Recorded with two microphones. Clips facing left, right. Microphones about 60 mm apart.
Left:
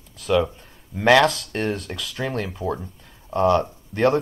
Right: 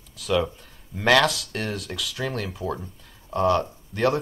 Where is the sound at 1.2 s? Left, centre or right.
Left.